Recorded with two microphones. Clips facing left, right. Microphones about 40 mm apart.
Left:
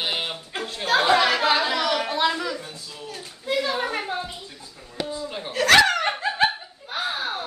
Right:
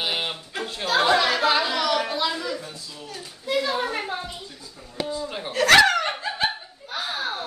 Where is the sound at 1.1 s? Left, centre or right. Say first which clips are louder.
Left 1 dB; left.